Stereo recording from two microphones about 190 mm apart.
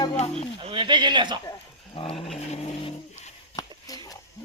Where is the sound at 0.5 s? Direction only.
25° right (ahead or behind).